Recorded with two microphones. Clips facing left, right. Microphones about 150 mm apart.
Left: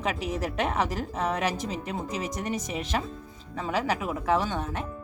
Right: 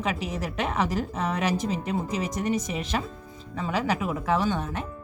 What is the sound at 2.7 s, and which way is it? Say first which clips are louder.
Speech: right 1 dB; 50° left (ahead or behind).